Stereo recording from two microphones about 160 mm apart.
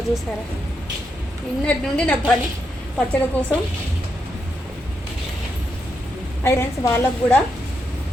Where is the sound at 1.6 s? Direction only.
5° left (ahead or behind).